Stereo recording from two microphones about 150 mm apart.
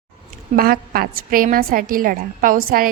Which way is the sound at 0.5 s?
80° right.